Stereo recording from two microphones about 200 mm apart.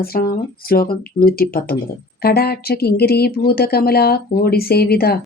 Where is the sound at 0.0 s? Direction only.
50° left (ahead or behind).